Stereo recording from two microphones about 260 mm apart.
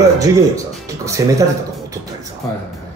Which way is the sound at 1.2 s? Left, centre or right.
Centre.